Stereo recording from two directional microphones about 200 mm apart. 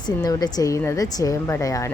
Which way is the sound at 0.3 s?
20° left (ahead or behind).